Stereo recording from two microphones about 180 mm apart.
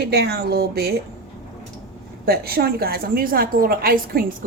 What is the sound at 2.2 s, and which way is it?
A woman's voice, 60° right (ahead or behind).